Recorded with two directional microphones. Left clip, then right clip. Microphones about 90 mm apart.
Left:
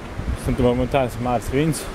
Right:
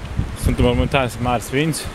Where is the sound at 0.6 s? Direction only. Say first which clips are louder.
Right 1 dB; 5° right (ahead or behind).